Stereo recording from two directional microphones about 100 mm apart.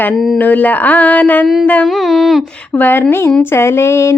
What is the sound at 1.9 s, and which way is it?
Speech, centre (ahead or behind).